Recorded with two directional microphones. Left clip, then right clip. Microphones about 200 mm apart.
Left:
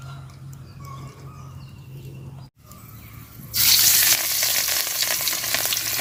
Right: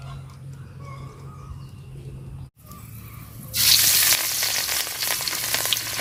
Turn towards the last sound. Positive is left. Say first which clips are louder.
# even
turn(degrees=0)  # may be behind; listen again after turning